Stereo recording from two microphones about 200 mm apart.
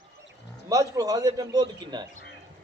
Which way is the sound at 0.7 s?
15° right (ahead or behind).